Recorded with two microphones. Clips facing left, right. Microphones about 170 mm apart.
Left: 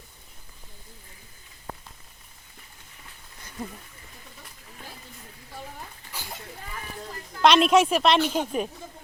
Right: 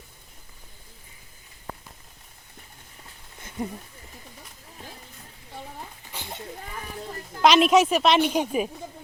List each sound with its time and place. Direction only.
6.1 s a sound: 25° right (ahead or behind)
7.4 s speech: centre (ahead or behind)
8.2 s speech: 15° right (ahead or behind)